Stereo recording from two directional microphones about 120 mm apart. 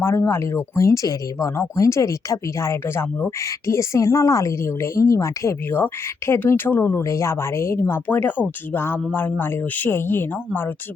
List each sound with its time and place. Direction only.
0.0 s speech: 20° left (ahead or behind)